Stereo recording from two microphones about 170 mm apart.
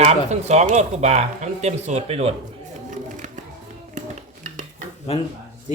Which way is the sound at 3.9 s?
45° right (ahead or behind).